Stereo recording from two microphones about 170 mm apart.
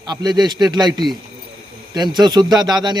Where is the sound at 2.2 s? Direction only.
25° right (ahead or behind).